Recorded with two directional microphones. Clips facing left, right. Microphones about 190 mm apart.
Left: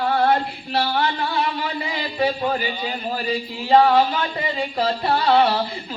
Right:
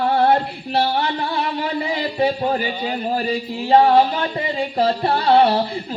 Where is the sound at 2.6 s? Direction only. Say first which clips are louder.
Right 3 dB; 50° right (ahead or behind).